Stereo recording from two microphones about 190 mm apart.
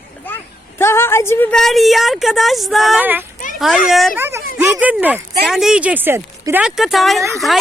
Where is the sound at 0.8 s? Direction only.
15° left (ahead or behind).